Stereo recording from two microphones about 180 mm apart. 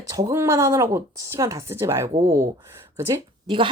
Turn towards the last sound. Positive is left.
turn(degrees=-25)  # may be behind; listen again after turning